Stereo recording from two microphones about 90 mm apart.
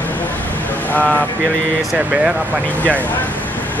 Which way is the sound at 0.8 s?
20° left (ahead or behind).